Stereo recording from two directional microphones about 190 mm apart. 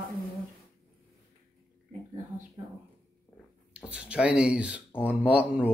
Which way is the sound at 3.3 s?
10° left (ahead or behind).